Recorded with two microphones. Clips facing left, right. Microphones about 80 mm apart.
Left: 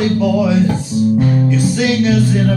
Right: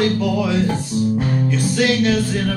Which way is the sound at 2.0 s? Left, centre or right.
Centre.